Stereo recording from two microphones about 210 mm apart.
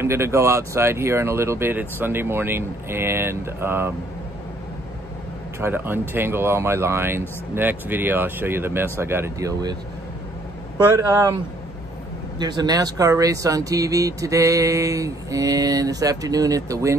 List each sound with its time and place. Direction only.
0.0 s speech: 10° right (ahead or behind)
5.6 s speech: 10° right (ahead or behind)
10.9 s speech: 15° right (ahead or behind)
12.4 s speech: 20° right (ahead or behind)